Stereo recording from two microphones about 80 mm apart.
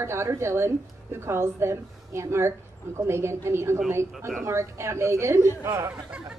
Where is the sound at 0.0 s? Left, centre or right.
Right.